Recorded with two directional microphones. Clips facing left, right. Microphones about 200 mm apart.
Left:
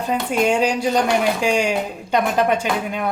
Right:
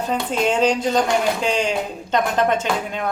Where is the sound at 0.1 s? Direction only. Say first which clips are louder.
Left 3 dB; 10° left (ahead or behind).